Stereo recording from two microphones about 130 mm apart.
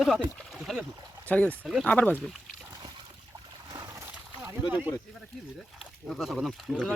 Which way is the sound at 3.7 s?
30° right (ahead or behind).